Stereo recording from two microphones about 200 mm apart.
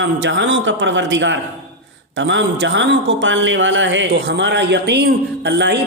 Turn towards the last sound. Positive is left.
turn(degrees=-60)  # may be behind; listen again after turning